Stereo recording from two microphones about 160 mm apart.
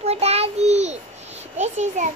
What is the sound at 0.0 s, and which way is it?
Child singing, 40° right (ahead or behind).